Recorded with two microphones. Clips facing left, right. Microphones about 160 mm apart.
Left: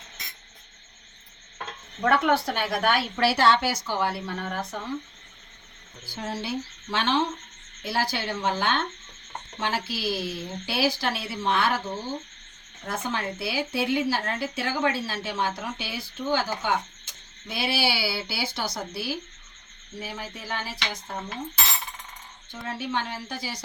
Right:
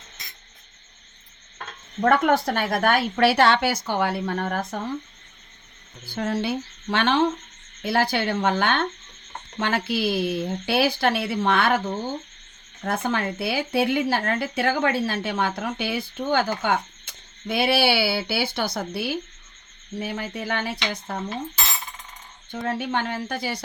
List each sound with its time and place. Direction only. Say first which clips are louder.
2.0 s a woman's voice: right 3 dB; 45° right (ahead or behind)
6.1 s speech: right 6 dB; 60° right (ahead or behind)
12.8 s speech: right 5 dB; 60° right (ahead or behind)
22.5 s speech: right 5 dB; 55° right (ahead or behind)